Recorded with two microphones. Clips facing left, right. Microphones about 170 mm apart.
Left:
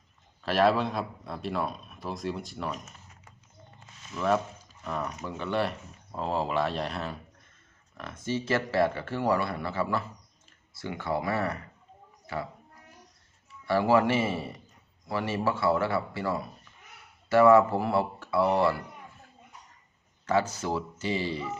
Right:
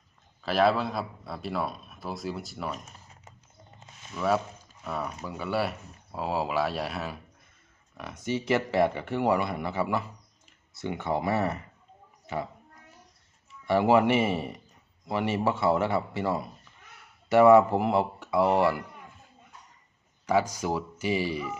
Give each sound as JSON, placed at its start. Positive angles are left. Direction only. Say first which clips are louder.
{"t": 0.4, "sound": "speech", "louder": "even", "side_deg": 0}
{"t": 4.1, "sound": "speech", "louder": "even", "side_deg": -5}
{"t": 13.7, "sound": "speech", "louder": "right 2 dB", "side_deg": -20}
{"t": 20.2, "sound": "speech", "louder": "right 1 dB", "side_deg": -10}